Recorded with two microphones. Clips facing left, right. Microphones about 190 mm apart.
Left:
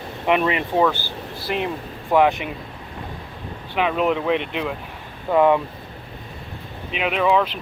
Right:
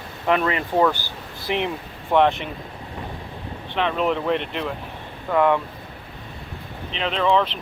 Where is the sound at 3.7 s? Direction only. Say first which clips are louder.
Left 2 dB; 5° left (ahead or behind).